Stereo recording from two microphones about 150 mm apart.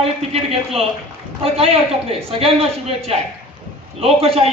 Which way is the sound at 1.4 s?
40° right (ahead or behind).